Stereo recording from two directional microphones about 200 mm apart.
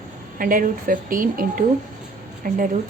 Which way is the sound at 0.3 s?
45° right (ahead or behind).